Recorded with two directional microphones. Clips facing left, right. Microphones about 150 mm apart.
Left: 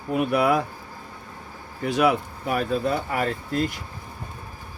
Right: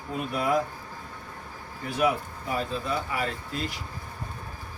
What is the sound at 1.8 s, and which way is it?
Speech, 90° left.